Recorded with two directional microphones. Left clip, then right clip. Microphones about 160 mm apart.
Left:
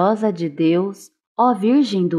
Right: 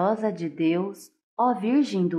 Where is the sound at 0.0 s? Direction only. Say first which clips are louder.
Left 6 dB; 30° left (ahead or behind).